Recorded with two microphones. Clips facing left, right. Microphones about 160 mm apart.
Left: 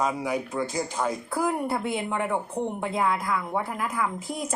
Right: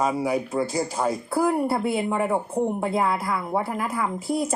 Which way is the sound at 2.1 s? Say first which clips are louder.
Right 3 dB; 35° right (ahead or behind).